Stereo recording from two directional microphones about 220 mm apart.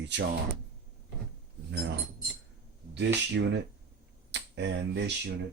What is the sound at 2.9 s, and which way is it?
Speech, 50° right (ahead or behind).